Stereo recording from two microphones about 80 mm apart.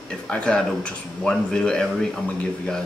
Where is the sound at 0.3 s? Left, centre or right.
Centre.